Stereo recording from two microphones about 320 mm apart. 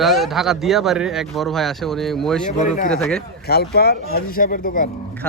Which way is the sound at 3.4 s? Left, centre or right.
Left.